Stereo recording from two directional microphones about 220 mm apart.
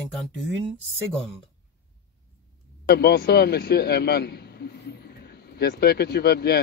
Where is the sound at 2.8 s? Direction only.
45° left (ahead or behind).